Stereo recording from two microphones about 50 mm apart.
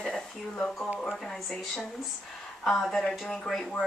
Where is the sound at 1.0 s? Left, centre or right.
Centre.